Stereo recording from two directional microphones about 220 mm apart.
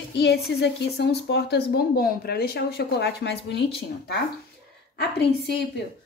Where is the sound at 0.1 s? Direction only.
50° left (ahead or behind).